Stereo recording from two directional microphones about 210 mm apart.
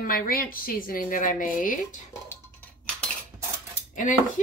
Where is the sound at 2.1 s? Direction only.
10° left (ahead or behind).